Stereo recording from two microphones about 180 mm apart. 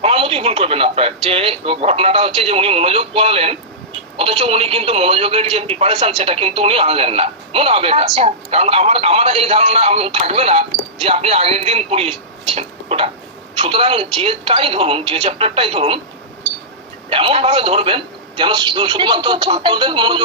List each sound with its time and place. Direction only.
0.0 s speech: 30° right (ahead or behind)
17.1 s a man's voice: 30° right (ahead or behind)